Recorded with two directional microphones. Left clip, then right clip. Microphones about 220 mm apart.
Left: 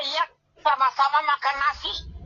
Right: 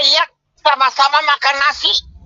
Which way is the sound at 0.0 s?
45° right (ahead or behind).